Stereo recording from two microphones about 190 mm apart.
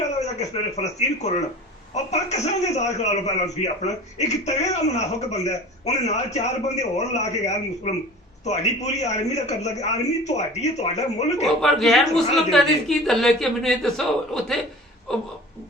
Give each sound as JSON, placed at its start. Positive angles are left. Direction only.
{"t": 0.2, "sound": "a man's voice", "side_deg": 35}
{"t": 11.6, "sound": "speech", "side_deg": 0}